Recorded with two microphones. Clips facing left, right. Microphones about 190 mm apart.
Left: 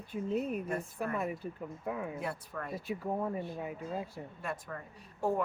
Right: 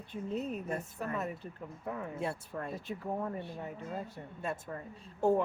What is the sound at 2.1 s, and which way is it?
Speech, 25° right (ahead or behind).